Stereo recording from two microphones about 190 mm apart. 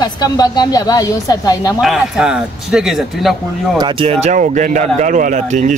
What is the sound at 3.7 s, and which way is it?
Speech, 25° right (ahead or behind).